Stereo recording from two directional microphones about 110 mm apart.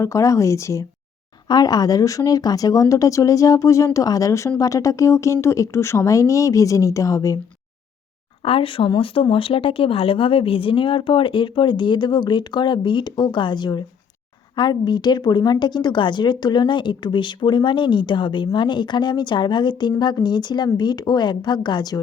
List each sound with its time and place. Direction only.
0.0 s speech: 30° left (ahead or behind)
8.4 s speech: 55° left (ahead or behind); by 22.0 s 40° left (ahead or behind)